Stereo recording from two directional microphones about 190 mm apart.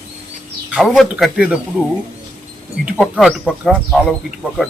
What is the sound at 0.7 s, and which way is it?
Speech, centre (ahead or behind).